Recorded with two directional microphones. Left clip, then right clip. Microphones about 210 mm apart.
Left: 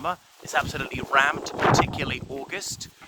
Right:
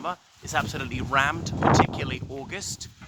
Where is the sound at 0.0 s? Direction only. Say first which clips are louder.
Left 3 dB; 15° left (ahead or behind).